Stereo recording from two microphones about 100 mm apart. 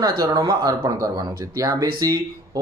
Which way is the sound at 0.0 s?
45° right (ahead or behind).